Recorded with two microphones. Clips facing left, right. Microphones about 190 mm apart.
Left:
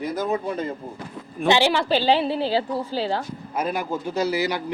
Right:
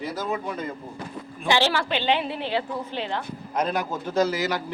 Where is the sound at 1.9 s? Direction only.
35° left (ahead or behind).